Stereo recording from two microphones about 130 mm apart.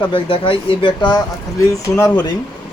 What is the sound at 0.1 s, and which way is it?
Speech, 40° left (ahead or behind).